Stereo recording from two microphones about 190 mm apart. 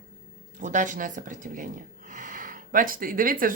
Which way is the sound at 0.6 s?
40° right (ahead or behind).